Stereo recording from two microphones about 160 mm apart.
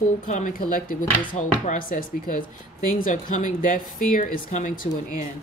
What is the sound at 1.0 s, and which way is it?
Speech, 30° left (ahead or behind).